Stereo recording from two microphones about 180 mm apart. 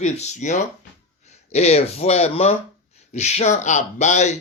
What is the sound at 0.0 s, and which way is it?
A man's voice, 40° left (ahead or behind).